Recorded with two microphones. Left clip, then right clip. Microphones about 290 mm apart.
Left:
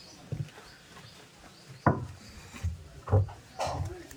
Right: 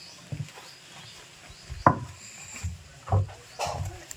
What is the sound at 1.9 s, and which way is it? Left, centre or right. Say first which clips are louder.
Wood: right 7 dB; centre.